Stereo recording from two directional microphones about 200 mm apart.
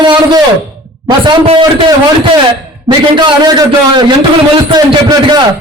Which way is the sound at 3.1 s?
20° right (ahead or behind).